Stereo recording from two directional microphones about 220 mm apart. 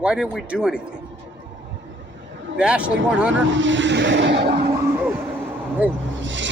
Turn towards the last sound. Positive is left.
turn(degrees=-55)  # may be behind; listen again after turning